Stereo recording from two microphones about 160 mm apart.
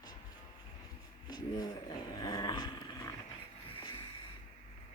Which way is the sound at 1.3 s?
25° left (ahead or behind).